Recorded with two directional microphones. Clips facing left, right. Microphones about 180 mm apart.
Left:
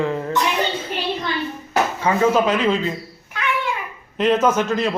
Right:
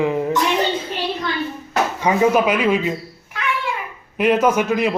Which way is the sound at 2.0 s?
15° right (ahead or behind).